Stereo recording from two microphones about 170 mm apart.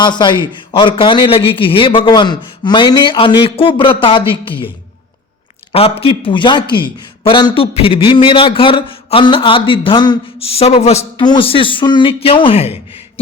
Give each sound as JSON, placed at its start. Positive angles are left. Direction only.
{"t": 0.0, "sound": "a man's voice", "side_deg": 25}
{"t": 5.7, "sound": "a man's voice", "side_deg": 35}
{"t": 11.2, "sound": "a man's voice", "side_deg": 30}